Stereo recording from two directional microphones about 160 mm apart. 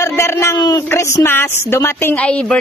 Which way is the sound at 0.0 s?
15° left (ahead or behind).